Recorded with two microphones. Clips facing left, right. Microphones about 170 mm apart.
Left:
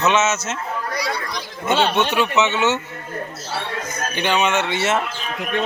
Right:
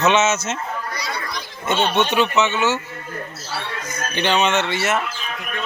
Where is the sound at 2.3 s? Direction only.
20° left (ahead or behind).